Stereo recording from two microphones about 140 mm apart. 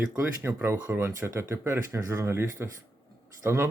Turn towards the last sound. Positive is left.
turn(degrees=-15)  # may be behind; listen again after turning